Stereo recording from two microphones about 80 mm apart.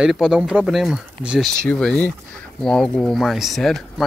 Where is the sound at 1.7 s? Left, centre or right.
Centre.